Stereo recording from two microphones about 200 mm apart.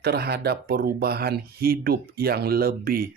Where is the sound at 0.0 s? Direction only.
55° right (ahead or behind).